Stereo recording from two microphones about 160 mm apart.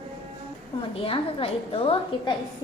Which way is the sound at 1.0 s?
35° left (ahead or behind).